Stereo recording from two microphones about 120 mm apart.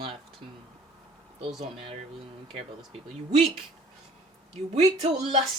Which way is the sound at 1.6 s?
55° right (ahead or behind).